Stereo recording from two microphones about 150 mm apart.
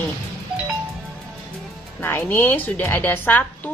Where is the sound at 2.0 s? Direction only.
15° left (ahead or behind).